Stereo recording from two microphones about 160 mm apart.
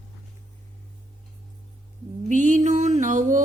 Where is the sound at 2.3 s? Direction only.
50° right (ahead or behind).